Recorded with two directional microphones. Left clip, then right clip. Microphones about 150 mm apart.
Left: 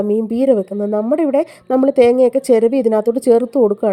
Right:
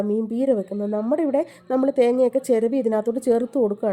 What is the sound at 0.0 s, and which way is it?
A woman's voice, 45° left (ahead or behind).